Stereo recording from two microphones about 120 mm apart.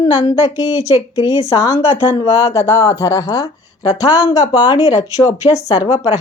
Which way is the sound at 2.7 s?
25° left (ahead or behind).